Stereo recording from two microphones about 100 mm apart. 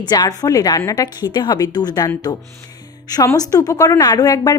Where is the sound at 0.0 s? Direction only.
45° left (ahead or behind).